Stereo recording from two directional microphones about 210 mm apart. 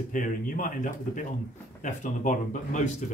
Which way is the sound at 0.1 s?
40° left (ahead or behind).